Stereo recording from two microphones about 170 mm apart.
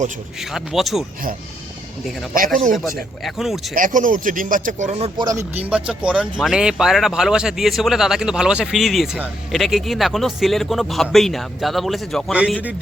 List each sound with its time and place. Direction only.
0.5 s speech: centre (ahead or behind)
2.3 s speech: 55° right (ahead or behind)
3.2 s speech: centre (ahead or behind)
3.8 s speech: 50° right (ahead or behind)
5.1 s speech: 20° right (ahead or behind); by 12.5 s 5° right (ahead or behind)